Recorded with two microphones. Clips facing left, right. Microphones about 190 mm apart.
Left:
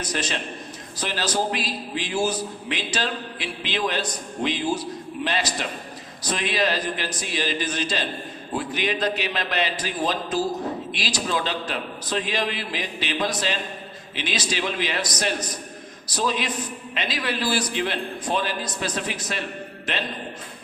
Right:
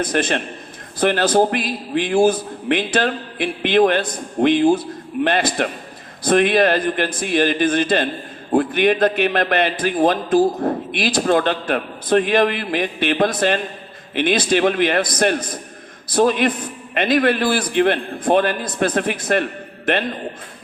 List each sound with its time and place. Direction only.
0.0 s a man's voice: 55° right (ahead or behind)